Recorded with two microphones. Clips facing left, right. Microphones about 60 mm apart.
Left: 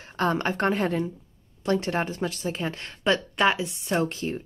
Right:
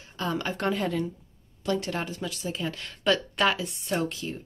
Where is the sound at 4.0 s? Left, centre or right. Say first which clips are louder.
Left 4 dB; left.